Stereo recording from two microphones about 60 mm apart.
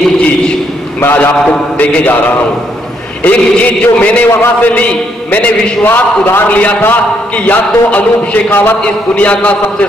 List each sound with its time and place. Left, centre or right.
1.0 s a man's voice: left
1.5 s a man's voice: centre
4.3 s a man's voice: left
4.7 s a man's voice: left
5.9 s a man's voice: left